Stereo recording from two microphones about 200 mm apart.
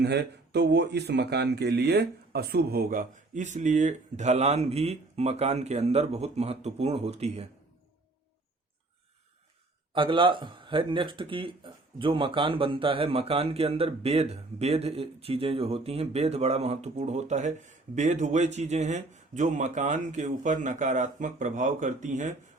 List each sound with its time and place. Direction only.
0.0 s speech: 55° right (ahead or behind); by 7.4 s 30° right (ahead or behind)
9.9 s speech: 25° right (ahead or behind)